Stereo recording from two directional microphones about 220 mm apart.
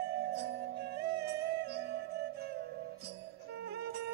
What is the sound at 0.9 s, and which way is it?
Music, 45° right (ahead or behind).